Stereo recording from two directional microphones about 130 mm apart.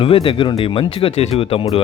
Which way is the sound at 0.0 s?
45° left (ahead or behind).